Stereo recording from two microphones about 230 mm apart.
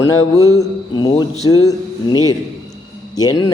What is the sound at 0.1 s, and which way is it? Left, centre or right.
A man's voice, centre.